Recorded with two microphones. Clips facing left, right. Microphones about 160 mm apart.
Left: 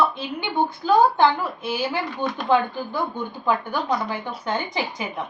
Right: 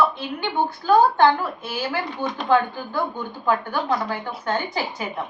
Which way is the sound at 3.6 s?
15° left (ahead or behind).